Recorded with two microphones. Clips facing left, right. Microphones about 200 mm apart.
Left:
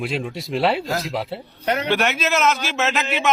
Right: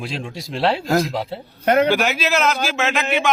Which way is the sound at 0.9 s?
50° right (ahead or behind).